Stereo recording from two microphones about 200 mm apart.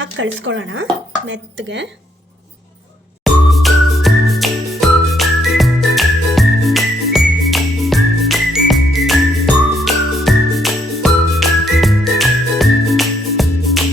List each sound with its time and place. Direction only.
0.0 s a woman's voice: 70° right (ahead or behind)
3.2 s music: centre (ahead or behind)